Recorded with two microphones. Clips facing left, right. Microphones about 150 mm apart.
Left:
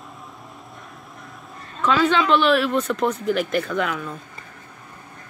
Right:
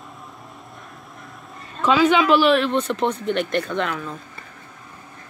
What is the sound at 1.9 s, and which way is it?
Speech, 10° right (ahead or behind).